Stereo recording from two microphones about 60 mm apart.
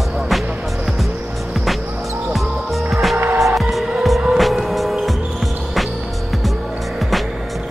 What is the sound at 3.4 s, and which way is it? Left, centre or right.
Music, centre.